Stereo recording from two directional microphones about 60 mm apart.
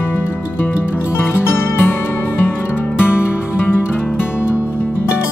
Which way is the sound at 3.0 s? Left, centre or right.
Left.